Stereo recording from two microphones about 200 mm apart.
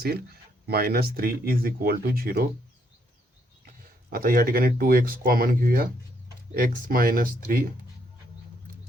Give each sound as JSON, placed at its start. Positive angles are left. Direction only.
{"t": 0.7, "sound": "speech", "side_deg": -50}
{"t": 4.1, "sound": "speech", "side_deg": -45}